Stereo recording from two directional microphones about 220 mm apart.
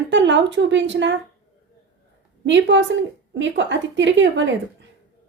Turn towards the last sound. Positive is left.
turn(degrees=-55)  # may be behind; listen again after turning